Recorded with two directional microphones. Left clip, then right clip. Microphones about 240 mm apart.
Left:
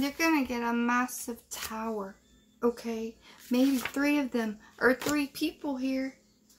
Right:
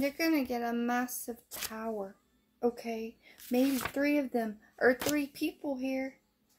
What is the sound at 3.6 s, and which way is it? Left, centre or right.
Speech, right.